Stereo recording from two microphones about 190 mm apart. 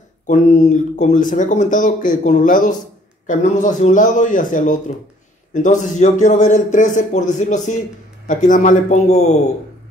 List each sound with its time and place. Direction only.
0.3 s speech: 40° left (ahead or behind)